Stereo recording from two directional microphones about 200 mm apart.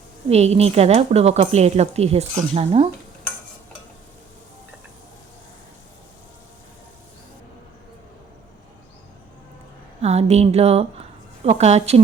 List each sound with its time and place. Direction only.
0.3 s a woman's voice: 30° right (ahead or behind)
10.0 s a woman's voice: 35° right (ahead or behind)